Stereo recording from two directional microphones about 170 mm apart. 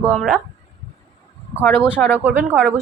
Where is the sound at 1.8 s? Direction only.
5° right (ahead or behind).